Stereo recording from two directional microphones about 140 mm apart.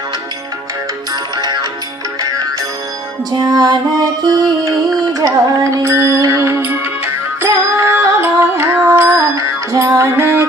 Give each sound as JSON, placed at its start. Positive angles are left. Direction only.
{"t": 1.4, "sound": "music", "side_deg": -30}
{"t": 3.4, "sound": "music", "side_deg": -30}